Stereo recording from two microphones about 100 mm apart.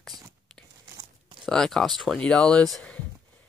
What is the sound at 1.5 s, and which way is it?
Speech, 5° left (ahead or behind).